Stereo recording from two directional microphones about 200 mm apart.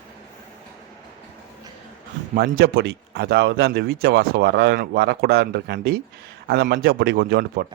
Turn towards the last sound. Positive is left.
turn(degrees=-50)  # may be behind; listen again after turning